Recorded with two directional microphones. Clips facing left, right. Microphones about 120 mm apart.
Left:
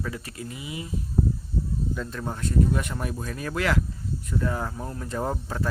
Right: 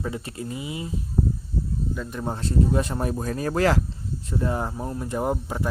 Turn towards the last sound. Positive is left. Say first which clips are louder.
# right 3 dB
turn(degrees=-15)  # may be behind; listen again after turning